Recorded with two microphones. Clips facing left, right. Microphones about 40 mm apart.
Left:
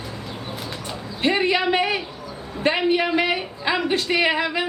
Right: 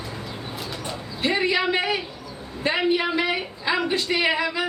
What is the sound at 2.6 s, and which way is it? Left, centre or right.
A man's voice, left.